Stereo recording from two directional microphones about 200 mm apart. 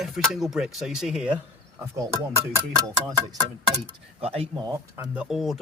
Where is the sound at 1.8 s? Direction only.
15° right (ahead or behind).